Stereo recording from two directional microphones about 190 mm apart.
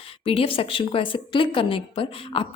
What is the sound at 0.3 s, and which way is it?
A woman's voice, 30° left (ahead or behind).